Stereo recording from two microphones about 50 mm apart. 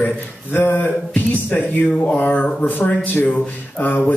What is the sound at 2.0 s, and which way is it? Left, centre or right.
Music, left.